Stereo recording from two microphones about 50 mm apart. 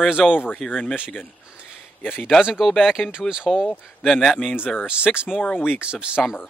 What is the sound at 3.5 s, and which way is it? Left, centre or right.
Speech, centre.